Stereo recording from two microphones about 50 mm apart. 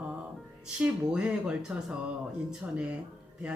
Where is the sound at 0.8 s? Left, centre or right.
Right.